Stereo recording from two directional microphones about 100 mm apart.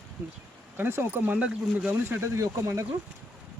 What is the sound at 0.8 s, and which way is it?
Speech, 20° right (ahead or behind).